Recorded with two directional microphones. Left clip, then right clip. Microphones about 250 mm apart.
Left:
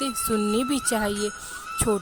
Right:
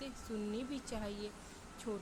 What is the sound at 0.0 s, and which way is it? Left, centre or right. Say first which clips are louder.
Speech: left 19 dB; left.